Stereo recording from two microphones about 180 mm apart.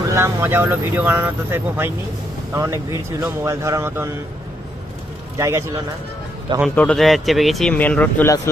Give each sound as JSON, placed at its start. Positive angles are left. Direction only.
{"t": 0.1, "sound": "speech", "side_deg": -15}
{"t": 5.4, "sound": "speech", "side_deg": -15}
{"t": 6.7, "sound": "speech", "side_deg": 5}